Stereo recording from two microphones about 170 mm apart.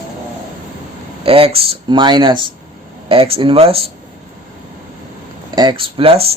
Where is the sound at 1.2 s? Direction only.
35° right (ahead or behind).